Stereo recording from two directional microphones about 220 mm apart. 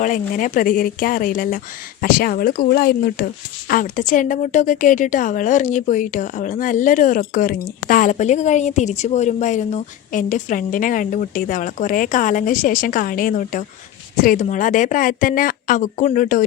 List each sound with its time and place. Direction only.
0.0 s a woman's voice: 35° left (ahead or behind)